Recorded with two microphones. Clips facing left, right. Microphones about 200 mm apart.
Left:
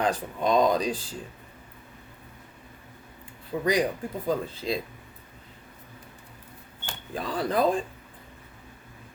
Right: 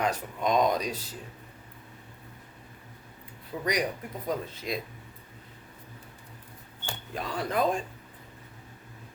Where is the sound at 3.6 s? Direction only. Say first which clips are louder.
Left 5 dB; 25° left (ahead or behind).